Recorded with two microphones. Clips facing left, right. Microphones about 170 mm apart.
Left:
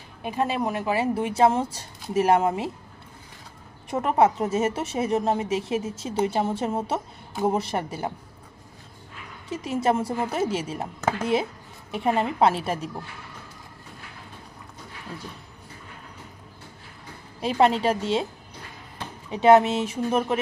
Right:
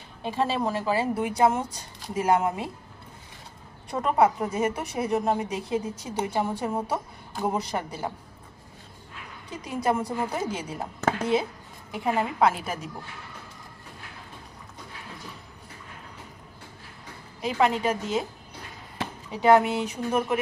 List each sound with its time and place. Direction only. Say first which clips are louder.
0.2 s speech: left 1 dB; 15° left (ahead or behind)
3.9 s speech: left 2 dB; 20° left (ahead or behind)
9.5 s speech: left 3 dB; 25° left (ahead or behind)
17.4 s speech: left 3 dB; 30° left (ahead or behind)
19.3 s speech: left 3 dB; 20° left (ahead or behind)